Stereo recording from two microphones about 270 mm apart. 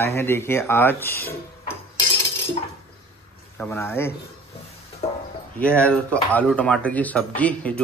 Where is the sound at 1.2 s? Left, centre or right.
Left.